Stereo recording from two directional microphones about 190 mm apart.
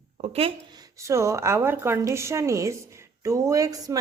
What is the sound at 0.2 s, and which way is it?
Speech, 30° right (ahead or behind).